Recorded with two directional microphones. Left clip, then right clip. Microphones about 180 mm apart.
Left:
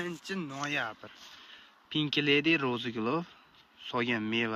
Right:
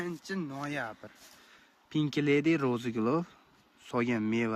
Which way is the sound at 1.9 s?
40° right (ahead or behind).